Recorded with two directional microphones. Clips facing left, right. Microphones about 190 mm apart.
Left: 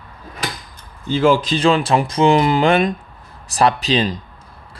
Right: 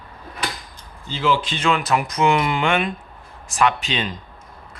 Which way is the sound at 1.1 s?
50° left (ahead or behind).